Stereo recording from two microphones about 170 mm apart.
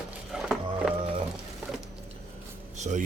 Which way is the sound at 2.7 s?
45° right (ahead or behind).